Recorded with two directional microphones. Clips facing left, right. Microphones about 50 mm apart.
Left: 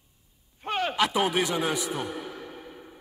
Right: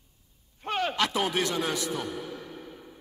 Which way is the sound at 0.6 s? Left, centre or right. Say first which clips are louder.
Left 2 dB; centre.